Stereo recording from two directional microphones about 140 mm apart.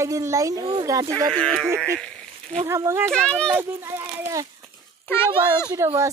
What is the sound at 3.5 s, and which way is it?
Speech, 15° right (ahead or behind).